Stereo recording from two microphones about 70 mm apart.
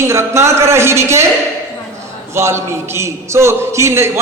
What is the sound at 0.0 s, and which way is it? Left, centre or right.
A man's voice, right.